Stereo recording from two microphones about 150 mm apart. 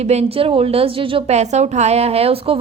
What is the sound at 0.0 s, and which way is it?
A woman's voice, 45° right (ahead or behind).